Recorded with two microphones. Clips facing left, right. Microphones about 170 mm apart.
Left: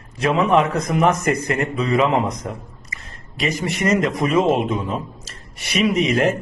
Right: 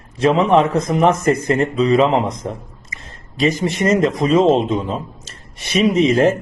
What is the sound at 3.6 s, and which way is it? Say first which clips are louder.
A man's voice: right 1 dB; 25° right (ahead or behind).